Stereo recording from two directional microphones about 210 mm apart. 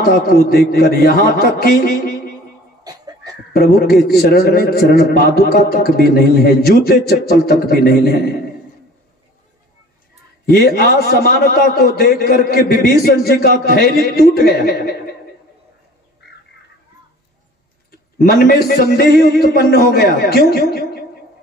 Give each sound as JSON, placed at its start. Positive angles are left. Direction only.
{"t": 0.0, "sound": "a man's voice", "side_deg": 45}
{"t": 2.8, "sound": "music", "side_deg": -20}
{"t": 3.5, "sound": "a man's voice", "side_deg": 45}
{"t": 10.4, "sound": "a man's voice", "side_deg": 50}
{"t": 16.2, "sound": "bird", "side_deg": 55}
{"t": 18.2, "sound": "a man's voice", "side_deg": 45}